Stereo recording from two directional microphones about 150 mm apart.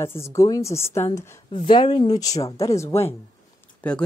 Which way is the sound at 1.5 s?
35° left (ahead or behind).